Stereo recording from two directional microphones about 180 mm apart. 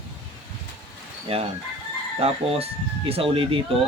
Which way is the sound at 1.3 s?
30° right (ahead or behind).